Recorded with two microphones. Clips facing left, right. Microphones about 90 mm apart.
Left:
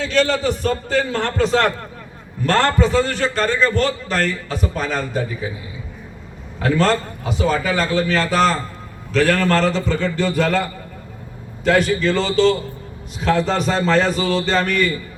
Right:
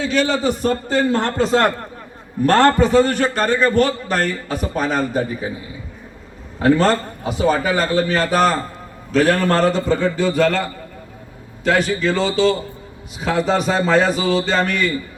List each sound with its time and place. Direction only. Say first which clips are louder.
0.0 s a man's voice: even; 5° right (ahead or behind)
0.7 s a man's voice: right 2 dB; 40° right (ahead or behind)
6.6 s a man's voice: right 3 dB; 35° right (ahead or behind)
9.3 s a man's voice: even; 20° right (ahead or behind)
9.6 s a man's voice: right 2 dB; 45° right (ahead or behind)
10.2 s a man's voice: right 2 dB; centre (ahead or behind)